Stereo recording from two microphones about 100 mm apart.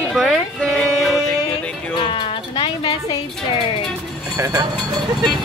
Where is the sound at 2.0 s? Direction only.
55° left (ahead or behind).